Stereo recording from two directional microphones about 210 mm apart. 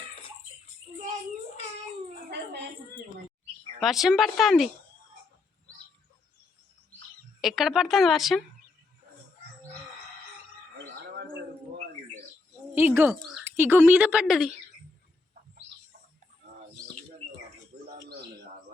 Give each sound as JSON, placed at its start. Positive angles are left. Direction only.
{"t": 3.8, "sound": "speech", "side_deg": 0}
{"t": 7.4, "sound": "speech", "side_deg": 0}
{"t": 12.7, "sound": "speech", "side_deg": -10}
{"t": 18.1, "sound": "bird", "side_deg": -50}